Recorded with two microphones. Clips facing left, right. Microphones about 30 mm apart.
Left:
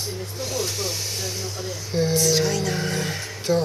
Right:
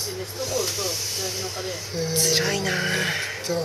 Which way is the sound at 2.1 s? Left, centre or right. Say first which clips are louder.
Even; right.